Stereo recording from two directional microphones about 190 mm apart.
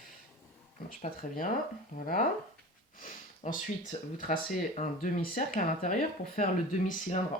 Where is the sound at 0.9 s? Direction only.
45° left (ahead or behind).